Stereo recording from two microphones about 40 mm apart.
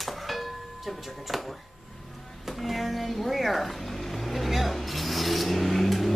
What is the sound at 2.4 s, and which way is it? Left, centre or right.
Vehicle, centre.